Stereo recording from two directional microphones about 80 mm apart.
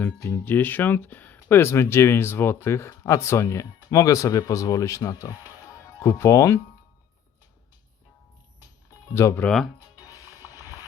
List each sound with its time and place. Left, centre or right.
0.2 s speech: left
0.4 s speech: left
5.6 s music: left
9.1 s speech: left
9.9 s music: left